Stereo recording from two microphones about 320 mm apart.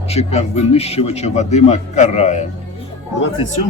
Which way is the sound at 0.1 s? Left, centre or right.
Centre.